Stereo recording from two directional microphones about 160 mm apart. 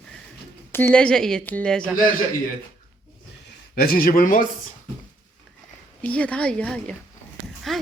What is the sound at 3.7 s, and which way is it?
Speech, 70° left (ahead or behind).